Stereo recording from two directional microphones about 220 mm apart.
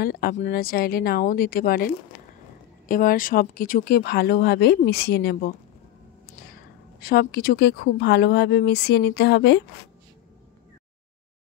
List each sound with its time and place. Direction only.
0.0 s speech: 45° left (ahead or behind)
2.9 s speech: 40° left (ahead or behind)
7.0 s speech: 45° left (ahead or behind)